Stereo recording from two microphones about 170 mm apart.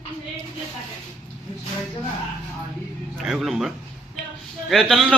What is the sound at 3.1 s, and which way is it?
A man's voice, centre (ahead or behind).